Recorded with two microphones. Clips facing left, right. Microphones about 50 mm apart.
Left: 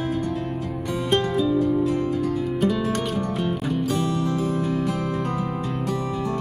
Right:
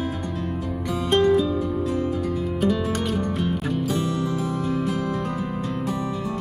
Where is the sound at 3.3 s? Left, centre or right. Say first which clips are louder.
Even; centre.